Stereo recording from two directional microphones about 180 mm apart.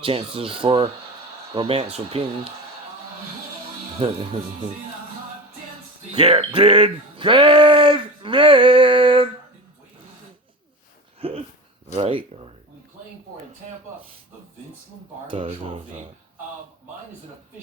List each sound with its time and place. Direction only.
0.0 s speech: 30° right (ahead or behind)
3.9 s speech: 30° right (ahead or behind)
6.1 s speech: 30° right (ahead or behind)
11.2 s a sound: 30° right (ahead or behind)
11.9 s speech: 35° right (ahead or behind)